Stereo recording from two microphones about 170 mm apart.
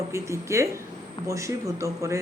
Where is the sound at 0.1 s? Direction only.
15° right (ahead or behind).